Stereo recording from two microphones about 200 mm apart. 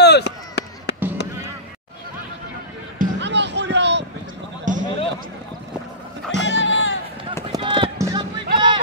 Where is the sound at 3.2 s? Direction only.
60° right (ahead or behind).